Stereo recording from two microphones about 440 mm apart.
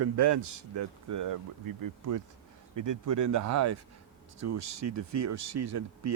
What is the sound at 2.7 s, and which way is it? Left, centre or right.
Speech, right.